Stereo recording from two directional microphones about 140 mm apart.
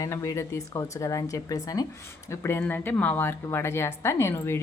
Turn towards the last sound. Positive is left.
turn(degrees=20)  # may be behind; listen again after turning